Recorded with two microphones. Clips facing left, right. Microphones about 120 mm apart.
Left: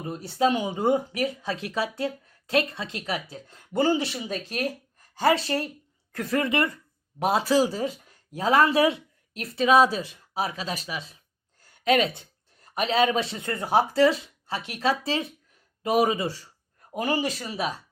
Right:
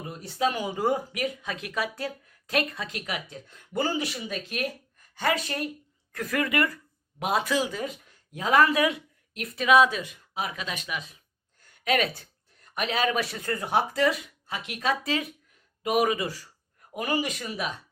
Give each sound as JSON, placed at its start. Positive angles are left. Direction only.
{"t": 0.1, "sound": "a woman's voice", "side_deg": 30}